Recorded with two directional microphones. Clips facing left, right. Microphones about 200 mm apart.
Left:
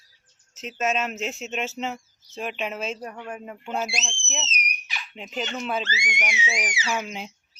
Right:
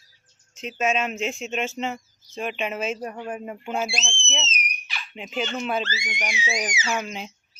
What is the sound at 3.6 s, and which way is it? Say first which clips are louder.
Speech: right 1 dB; 5° right (ahead or behind).